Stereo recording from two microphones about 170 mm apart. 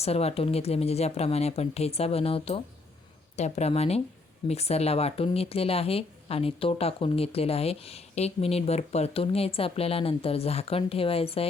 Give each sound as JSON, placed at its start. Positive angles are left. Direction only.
{"t": 0.0, "sound": "speech", "side_deg": 35}